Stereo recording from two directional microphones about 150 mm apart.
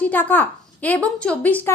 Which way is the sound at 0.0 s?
10° left (ahead or behind).